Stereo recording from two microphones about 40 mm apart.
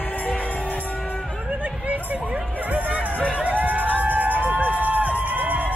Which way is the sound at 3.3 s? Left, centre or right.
Right.